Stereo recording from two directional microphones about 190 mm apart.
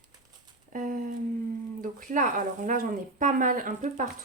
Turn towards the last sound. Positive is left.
turn(degrees=-40)  # may be behind; listen again after turning